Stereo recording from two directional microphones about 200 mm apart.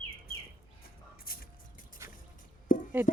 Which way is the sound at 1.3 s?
50° left (ahead or behind).